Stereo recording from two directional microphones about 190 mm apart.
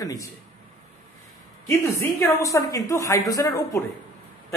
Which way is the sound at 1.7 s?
15° left (ahead or behind).